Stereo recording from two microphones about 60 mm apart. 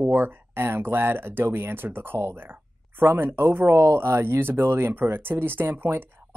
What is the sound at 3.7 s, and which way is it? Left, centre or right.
Speech, right.